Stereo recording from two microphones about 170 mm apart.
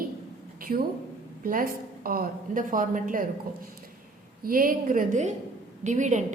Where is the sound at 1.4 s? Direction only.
55° right (ahead or behind).